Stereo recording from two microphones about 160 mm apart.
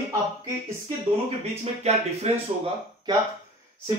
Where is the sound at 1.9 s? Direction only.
40° right (ahead or behind).